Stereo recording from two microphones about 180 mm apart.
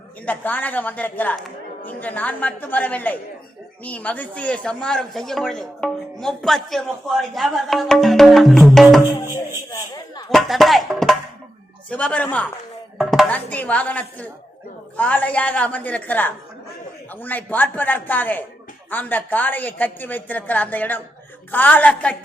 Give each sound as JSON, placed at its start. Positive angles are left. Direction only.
{"t": 0.3, "sound": "a woman's voice", "side_deg": 10}
{"t": 9.3, "sound": "speech", "side_deg": 20}
{"t": 10.2, "sound": "a woman's voice", "side_deg": 0}